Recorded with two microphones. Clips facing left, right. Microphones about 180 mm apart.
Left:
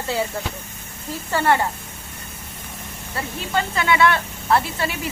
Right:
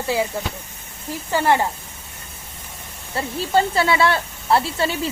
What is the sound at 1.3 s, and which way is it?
Speech, 15° right (ahead or behind).